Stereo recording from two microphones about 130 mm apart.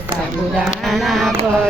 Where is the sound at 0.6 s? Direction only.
Centre (ahead or behind).